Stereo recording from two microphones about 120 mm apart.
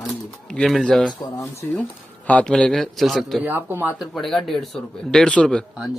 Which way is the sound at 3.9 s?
Centre (ahead or behind).